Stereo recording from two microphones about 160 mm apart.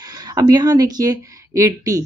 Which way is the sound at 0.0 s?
25° right (ahead or behind).